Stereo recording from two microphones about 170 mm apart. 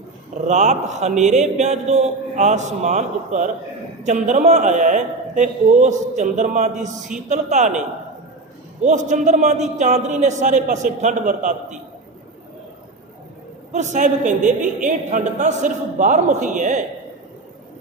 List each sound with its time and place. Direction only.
0.4 s a woman's voice: 45° right (ahead or behind)
13.7 s a woman's voice: 45° right (ahead or behind)